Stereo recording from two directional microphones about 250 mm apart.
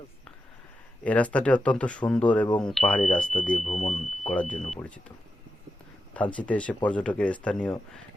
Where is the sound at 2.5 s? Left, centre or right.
Centre.